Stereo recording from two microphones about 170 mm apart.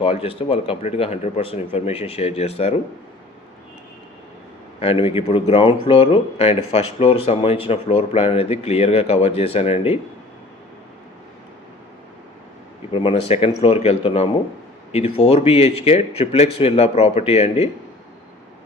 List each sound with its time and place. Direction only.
0.0 s speech: 35° left (ahead or behind)
4.8 s speech: 35° left (ahead or behind)
12.9 s speech: 30° left (ahead or behind)